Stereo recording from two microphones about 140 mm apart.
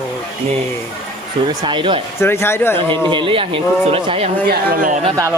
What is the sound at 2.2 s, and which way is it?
Speech, 15° left (ahead or behind).